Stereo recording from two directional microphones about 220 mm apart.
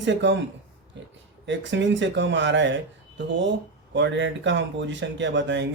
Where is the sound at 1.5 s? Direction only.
55° right (ahead or behind).